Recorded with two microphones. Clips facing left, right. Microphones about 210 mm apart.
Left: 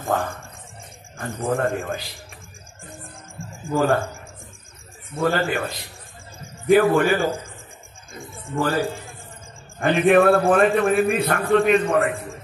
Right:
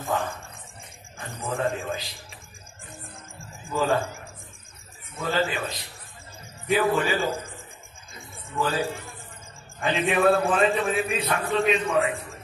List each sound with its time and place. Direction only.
0.0 s a man's voice: 50° left (ahead or behind)
3.7 s a man's voice: 55° left (ahead or behind)
5.2 s a man's voice: 55° left (ahead or behind)